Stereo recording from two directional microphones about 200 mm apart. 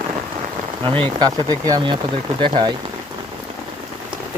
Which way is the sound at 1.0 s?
20° right (ahead or behind).